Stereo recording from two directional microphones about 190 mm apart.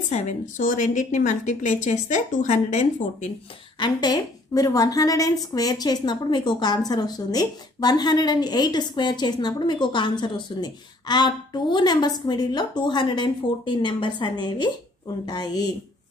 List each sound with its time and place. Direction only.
0.1 s a woman's voice: 40° left (ahead or behind)
3.8 s a woman's voice: 20° left (ahead or behind)